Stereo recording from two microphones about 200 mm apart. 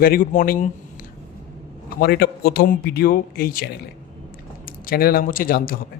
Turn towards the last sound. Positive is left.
turn(degrees=45)  # may be behind; listen again after turning